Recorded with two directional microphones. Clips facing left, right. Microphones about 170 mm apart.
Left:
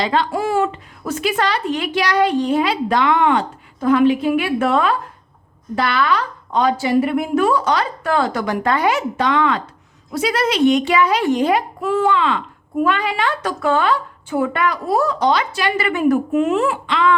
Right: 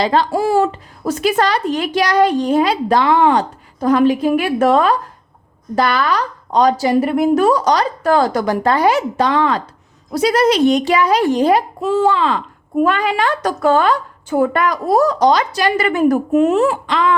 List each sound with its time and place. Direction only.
0.0 s a child's voice: 35° right (ahead or behind)